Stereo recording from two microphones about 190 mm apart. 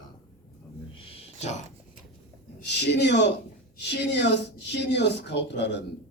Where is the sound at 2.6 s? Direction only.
60° left (ahead or behind).